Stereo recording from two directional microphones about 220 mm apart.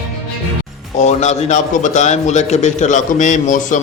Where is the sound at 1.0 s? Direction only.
30° left (ahead or behind).